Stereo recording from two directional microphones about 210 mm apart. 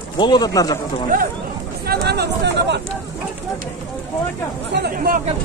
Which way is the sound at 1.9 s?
50° right (ahead or behind).